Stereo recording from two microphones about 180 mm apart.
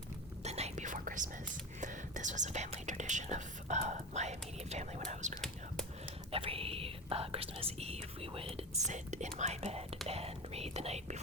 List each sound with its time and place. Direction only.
0.4 s whispering: 35° right (ahead or behind)
1.8 s speech: 45° right (ahead or behind)